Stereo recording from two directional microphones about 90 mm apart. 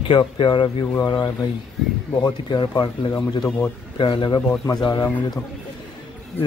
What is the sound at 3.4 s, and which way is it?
Speech, 15° left (ahead or behind).